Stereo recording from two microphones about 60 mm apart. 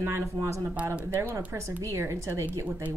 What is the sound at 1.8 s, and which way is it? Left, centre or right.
Speech, right.